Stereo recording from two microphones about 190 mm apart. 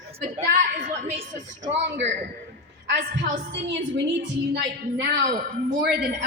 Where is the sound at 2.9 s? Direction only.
55° right (ahead or behind).